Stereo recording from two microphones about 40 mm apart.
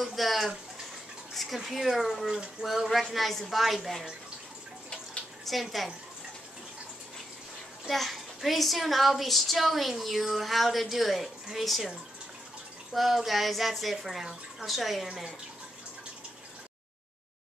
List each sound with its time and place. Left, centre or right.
0.0 s a sound: centre
1.3 s a child's voice: centre
4.9 s bathtub: centre
7.9 s a child's voice: centre
12.9 s a child's voice: centre